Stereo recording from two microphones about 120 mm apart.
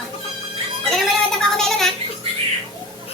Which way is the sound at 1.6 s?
Centre (ahead or behind).